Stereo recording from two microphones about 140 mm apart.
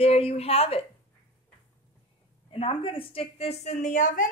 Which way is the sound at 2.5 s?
40° left (ahead or behind).